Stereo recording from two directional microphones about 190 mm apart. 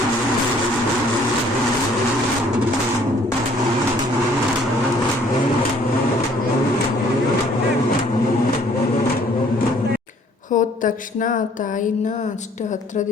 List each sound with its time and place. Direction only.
10.5 s speech: 45° left (ahead or behind)